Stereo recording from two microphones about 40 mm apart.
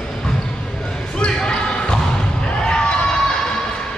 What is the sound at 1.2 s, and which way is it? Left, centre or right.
Basketball bounce, centre.